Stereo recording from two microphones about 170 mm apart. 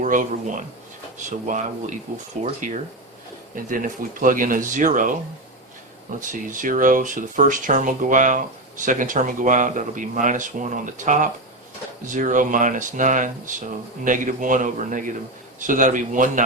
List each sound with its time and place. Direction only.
0.0 s speech: 50° right (ahead or behind)
6.1 s speech: 50° right (ahead or behind)